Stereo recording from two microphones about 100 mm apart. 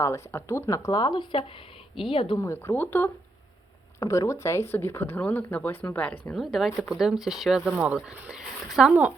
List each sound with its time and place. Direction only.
0.0 s speech: 25° left (ahead or behind); by 2.4 s 60° left (ahead or behind)
2.4 s speech: 25° left (ahead or behind)
4.0 s a woman's voice: 35° left (ahead or behind); by 6.3 s 15° left (ahead or behind)
6.3 s speech: centre (ahead or behind)